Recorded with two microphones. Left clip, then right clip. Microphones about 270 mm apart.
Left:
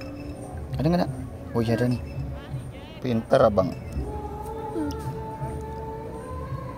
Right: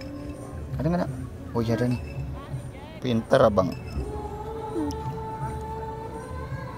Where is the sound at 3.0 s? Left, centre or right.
Centre.